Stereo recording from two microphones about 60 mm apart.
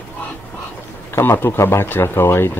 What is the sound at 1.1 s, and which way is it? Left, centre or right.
Speech, left.